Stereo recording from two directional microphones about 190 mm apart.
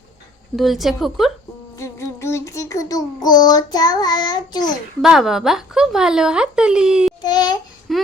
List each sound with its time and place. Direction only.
0.5 s speech: centre (ahead or behind)
1.7 s child singing: 15° left (ahead or behind)
5.0 s speech: centre (ahead or behind)
7.2 s child singing: 20° left (ahead or behind)
7.9 s a sound: centre (ahead or behind)